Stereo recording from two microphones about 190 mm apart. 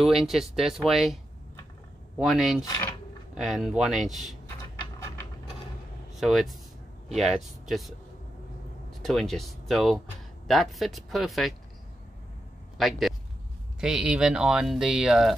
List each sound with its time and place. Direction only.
0.0 s speech: centre (ahead or behind)
2.1 s speech: centre (ahead or behind)
2.6 s speech: 20° left (ahead or behind)
3.3 s speech: centre (ahead or behind)
6.1 s speech: centre (ahead or behind)
9.0 s speech: centre (ahead or behind)
12.7 s speech: centre (ahead or behind)